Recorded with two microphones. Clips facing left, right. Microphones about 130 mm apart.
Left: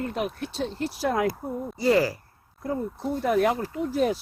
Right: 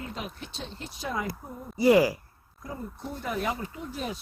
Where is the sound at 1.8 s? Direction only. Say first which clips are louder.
Right 2 dB; 15° right (ahead or behind).